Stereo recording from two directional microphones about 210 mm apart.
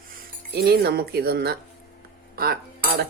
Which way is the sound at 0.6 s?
50° right (ahead or behind).